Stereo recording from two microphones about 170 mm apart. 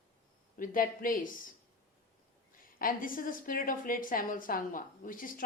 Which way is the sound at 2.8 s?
55° left (ahead or behind).